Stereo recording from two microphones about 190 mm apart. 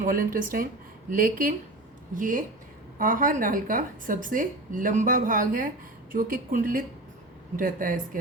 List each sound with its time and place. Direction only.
0.0 s a woman's voice: 45° right (ahead or behind)